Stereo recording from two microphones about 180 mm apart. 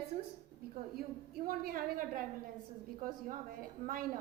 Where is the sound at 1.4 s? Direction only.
55° right (ahead or behind).